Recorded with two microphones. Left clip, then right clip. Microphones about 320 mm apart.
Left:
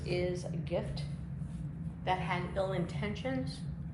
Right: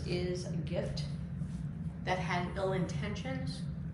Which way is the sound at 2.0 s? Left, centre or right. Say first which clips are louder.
Left 1 dB; centre.